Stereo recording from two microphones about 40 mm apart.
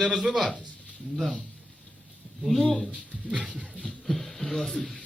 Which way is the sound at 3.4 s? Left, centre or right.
Centre.